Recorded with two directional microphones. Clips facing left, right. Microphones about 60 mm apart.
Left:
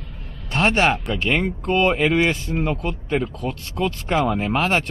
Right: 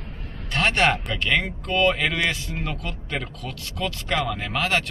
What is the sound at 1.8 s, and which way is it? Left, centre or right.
Speech, left.